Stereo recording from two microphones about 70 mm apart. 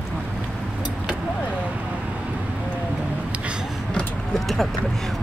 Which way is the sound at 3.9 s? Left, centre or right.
Centre.